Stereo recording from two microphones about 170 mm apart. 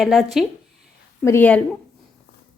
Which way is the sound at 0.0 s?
Centre (ahead or behind).